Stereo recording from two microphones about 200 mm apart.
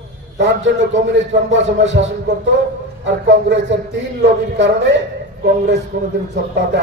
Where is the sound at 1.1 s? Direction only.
65° right (ahead or behind).